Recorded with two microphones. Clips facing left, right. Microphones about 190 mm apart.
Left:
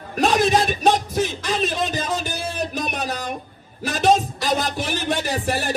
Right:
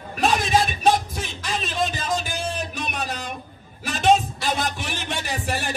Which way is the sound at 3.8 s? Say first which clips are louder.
Left 1 dB; 35° left (ahead or behind).